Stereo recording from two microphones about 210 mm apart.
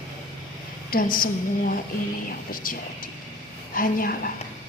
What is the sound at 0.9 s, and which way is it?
A woman's voice, 40° left (ahead or behind).